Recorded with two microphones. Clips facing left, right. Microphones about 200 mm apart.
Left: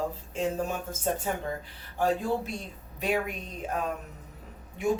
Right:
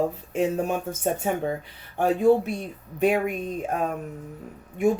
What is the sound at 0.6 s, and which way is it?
Speech, 60° right (ahead or behind).